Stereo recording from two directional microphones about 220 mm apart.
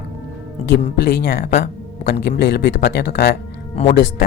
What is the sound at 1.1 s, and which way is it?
Speech, 45° left (ahead or behind).